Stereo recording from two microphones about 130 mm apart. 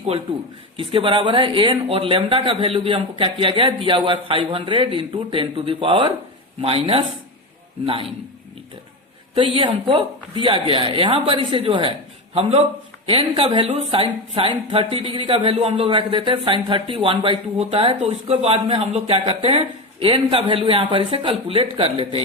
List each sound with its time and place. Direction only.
0.8 s speech: 45° right (ahead or behind)
9.3 s speech: 40° right (ahead or behind)
12.4 s speech: 50° right (ahead or behind)